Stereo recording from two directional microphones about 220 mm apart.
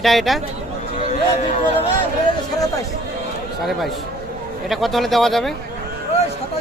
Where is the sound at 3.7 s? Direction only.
Centre (ahead or behind).